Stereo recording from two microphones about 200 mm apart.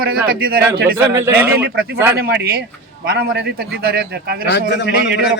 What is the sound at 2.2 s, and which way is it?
A man's voice, 50° right (ahead or behind).